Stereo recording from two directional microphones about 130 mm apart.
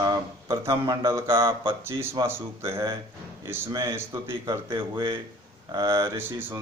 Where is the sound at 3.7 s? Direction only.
20° right (ahead or behind).